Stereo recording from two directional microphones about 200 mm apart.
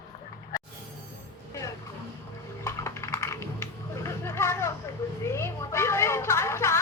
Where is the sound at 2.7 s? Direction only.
15° left (ahead or behind).